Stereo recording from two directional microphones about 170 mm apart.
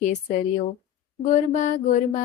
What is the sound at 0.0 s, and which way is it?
Mantra, 45° left (ahead or behind).